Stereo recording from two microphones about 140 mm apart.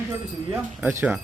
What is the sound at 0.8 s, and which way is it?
Speech, 10° right (ahead or behind).